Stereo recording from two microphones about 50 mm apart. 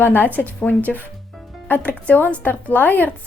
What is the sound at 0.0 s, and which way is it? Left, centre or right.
Speech, left.